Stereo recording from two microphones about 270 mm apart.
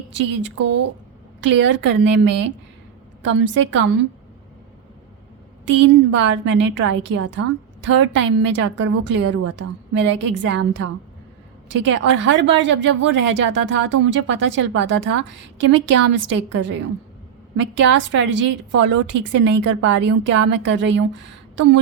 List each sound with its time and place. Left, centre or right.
0.1 s a woman's voice: right
5.6 s a woman's voice: right
9.2 s a woman's voice: right
9.6 s a woman's voice: right